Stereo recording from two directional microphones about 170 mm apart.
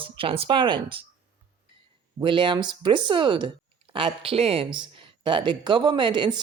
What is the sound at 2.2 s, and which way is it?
Speech, 30° right (ahead or behind).